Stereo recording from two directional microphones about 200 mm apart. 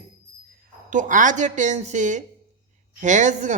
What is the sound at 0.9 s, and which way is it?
Speech, 40° right (ahead or behind).